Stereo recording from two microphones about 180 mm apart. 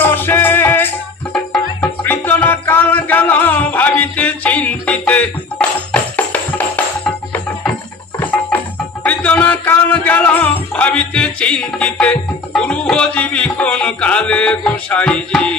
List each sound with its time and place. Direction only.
0.0 s music: 10° left (ahead or behind)